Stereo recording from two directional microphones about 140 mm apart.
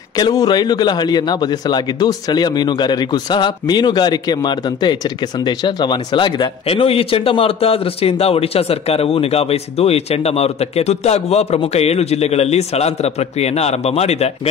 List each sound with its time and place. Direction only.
0.1 s a man's voice: 25° left (ahead or behind); by 14.5 s 50° left (ahead or behind)